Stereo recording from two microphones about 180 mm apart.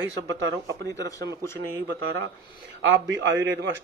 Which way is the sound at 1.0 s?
20° left (ahead or behind).